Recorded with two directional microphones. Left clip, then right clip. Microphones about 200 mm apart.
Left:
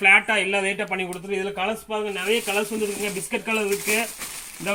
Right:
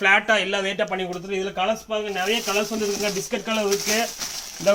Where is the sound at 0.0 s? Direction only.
15° right (ahead or behind).